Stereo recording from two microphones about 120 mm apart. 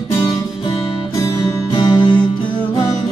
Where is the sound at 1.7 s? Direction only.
40° left (ahead or behind).